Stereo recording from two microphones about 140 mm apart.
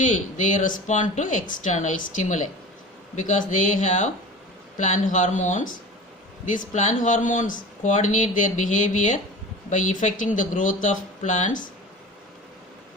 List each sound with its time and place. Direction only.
0.0 s speech: 65° left (ahead or behind)